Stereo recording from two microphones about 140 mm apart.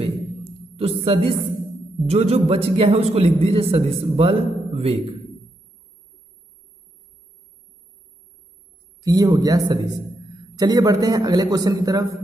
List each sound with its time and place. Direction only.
0.7 s a man's voice: 45° right (ahead or behind)
9.0 s a man's voice: 25° right (ahead or behind)